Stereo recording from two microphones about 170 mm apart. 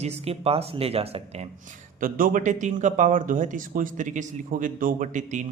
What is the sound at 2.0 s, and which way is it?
Speech, 50° right (ahead or behind).